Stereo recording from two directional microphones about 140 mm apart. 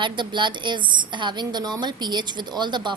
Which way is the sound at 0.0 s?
35° right (ahead or behind).